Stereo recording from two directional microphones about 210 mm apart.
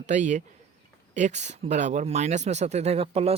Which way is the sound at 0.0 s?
35° right (ahead or behind).